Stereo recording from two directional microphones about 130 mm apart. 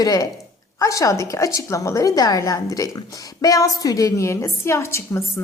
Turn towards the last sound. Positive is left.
turn(degrees=20)  # may be behind; listen again after turning